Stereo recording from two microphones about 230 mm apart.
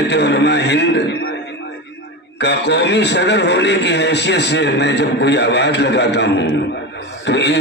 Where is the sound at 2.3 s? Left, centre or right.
Left.